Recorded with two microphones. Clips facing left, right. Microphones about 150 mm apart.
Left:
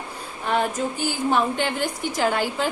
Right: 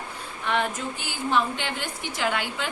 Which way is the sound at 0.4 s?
40° left (ahead or behind).